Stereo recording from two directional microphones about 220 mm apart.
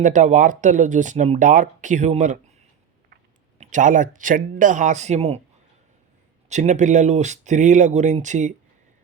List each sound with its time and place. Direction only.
0.0 s speech: 35° right (ahead or behind)
3.6 s speech: 35° right (ahead or behind)
6.5 s speech: 35° right (ahead or behind)